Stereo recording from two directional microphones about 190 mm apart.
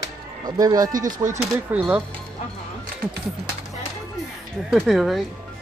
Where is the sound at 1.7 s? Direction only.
10° right (ahead or behind).